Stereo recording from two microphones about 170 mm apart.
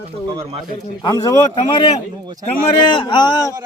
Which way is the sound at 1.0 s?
20° left (ahead or behind).